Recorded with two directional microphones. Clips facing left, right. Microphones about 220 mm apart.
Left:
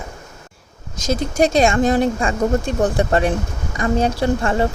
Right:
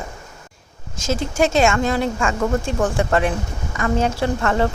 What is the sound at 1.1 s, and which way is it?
Speech, 40° left (ahead or behind).